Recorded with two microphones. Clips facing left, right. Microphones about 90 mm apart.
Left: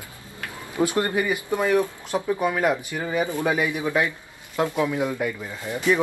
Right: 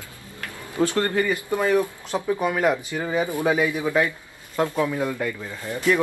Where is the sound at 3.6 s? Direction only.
15° left (ahead or behind).